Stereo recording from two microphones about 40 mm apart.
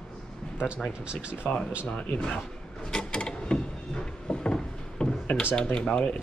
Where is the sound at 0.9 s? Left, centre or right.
Right.